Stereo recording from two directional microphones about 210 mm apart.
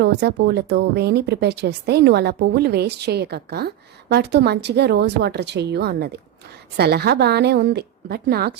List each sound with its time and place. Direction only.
0.0 s a woman's voice: 50° right (ahead or behind)